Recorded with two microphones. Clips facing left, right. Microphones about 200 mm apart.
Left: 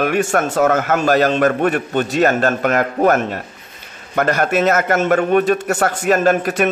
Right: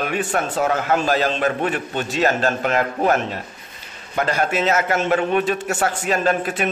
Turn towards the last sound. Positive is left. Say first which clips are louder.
# left 5 dB
turn(degrees=45)  # may be behind; listen again after turning